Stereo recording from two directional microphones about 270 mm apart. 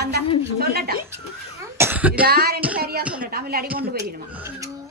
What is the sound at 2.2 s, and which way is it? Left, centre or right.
A woman's voice, right.